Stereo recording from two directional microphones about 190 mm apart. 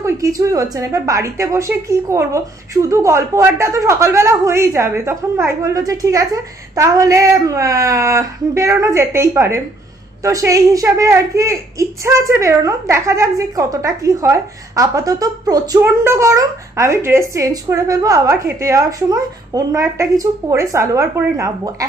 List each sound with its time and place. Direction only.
0.0 s a woman's voice: 15° right (ahead or behind)